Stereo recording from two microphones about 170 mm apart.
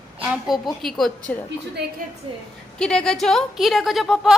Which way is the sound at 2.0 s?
55° right (ahead or behind).